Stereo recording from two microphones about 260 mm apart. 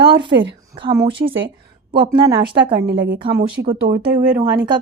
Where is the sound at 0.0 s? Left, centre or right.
Centre.